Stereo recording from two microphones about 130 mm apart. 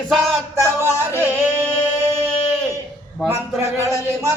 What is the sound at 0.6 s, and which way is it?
Speech, 20° right (ahead or behind).